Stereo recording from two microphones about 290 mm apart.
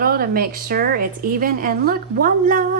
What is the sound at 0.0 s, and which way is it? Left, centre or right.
A woman's voice, right.